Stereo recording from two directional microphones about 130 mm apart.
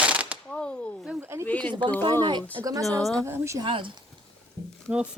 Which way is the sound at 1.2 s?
20° right (ahead or behind).